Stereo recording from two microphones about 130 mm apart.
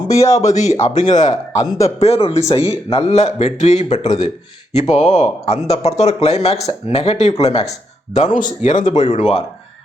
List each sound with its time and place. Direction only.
0.2 s speech: 25° left (ahead or behind)
0.4 s speech: 65° left (ahead or behind)
2.0 s speech: 50° left (ahead or behind)
8.1 s speech: 80° left; by 9.4 s 55° left (ahead or behind)